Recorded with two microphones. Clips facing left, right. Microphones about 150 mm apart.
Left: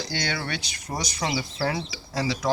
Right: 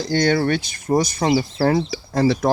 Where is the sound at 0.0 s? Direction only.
45° right (ahead or behind).